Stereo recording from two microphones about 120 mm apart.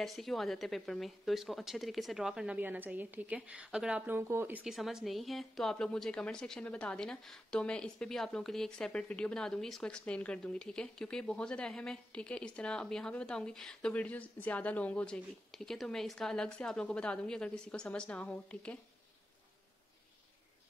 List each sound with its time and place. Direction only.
0.0 s a woman's voice: centre (ahead or behind); by 4.6 s 15° right (ahead or behind)
4.6 s a woman's voice: centre (ahead or behind)